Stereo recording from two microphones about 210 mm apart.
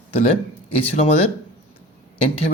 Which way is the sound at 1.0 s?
30° left (ahead or behind).